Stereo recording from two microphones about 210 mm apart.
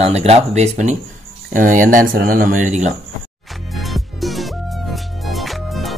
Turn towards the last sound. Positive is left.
turn(degrees=0)  # may be behind; listen again after turning